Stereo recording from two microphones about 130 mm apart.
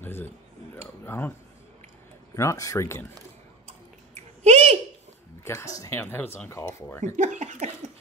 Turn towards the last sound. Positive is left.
turn(degrees=-65)  # may be behind; listen again after turning